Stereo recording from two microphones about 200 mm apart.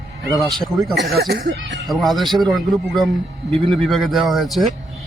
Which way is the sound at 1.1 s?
50° right (ahead or behind).